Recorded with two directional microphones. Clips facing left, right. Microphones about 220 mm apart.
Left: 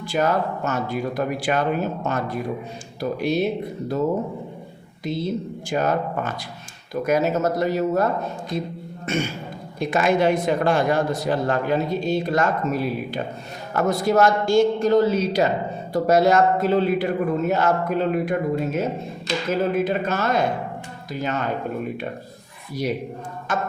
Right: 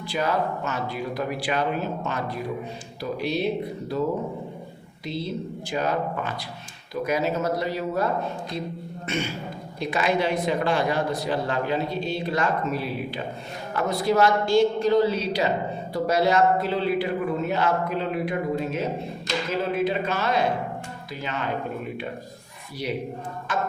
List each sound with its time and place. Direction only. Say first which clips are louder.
0.0 s speech: left 4 dB; 45° left (ahead or behind)
5.0 s speech: left 4 dB; 45° left (ahead or behind)
23.5 s speech: left 2 dB; 45° left (ahead or behind)